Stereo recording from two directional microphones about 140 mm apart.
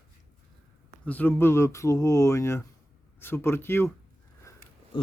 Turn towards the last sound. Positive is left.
turn(degrees=35)  # may be behind; listen again after turning